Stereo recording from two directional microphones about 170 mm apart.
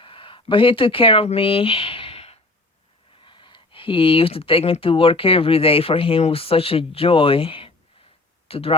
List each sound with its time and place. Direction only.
0.0 s speech: 30° left (ahead or behind)